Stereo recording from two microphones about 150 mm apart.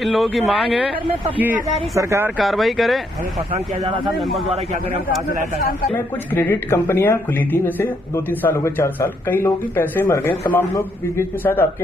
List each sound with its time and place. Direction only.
0.0 s speech: centre (ahead or behind)
1.4 s speech: 15° right (ahead or behind)
2.3 s speech: centre (ahead or behind)
3.5 s speech: 40° right (ahead or behind)
5.9 s speech: 15° left (ahead or behind)